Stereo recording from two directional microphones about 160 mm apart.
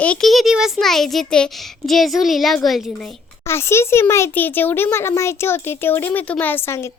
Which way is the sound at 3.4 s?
15° left (ahead or behind).